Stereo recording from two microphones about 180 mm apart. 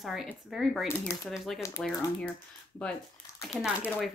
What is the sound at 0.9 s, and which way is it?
Speech, 15° left (ahead or behind).